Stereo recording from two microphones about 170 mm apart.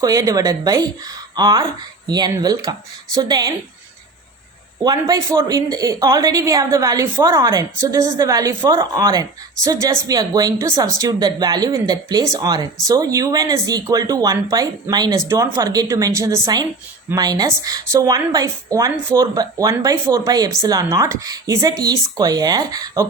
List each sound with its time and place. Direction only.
0.0 s a woman's voice: 20° right (ahead or behind)
4.8 s a woman's voice: 20° right (ahead or behind)